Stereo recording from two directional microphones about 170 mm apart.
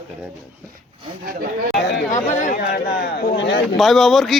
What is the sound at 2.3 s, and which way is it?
Speech, 45° left (ahead or behind).